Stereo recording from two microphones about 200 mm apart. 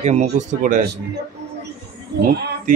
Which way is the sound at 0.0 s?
35° right (ahead or behind).